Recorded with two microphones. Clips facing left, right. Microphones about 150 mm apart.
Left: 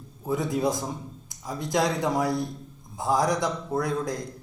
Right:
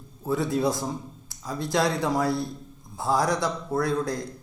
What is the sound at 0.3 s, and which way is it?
A man's voice, 20° left (ahead or behind).